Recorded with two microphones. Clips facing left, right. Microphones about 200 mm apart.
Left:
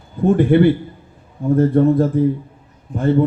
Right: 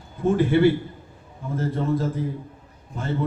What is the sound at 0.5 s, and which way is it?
Speech, 55° left (ahead or behind).